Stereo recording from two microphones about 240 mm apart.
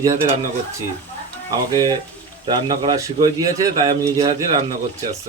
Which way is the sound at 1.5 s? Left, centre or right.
Centre.